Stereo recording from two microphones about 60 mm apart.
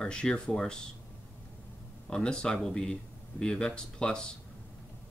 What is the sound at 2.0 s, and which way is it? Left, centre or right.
Speech, centre.